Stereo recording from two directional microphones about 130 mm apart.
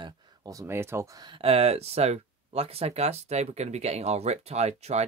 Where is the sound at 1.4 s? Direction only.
55° right (ahead or behind).